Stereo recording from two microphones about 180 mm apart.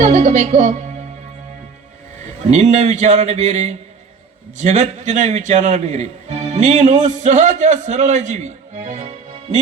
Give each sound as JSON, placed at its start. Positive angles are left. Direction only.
{"t": 0.0, "sound": "music", "side_deg": -35}
{"t": 2.5, "sound": "a man's voice", "side_deg": -40}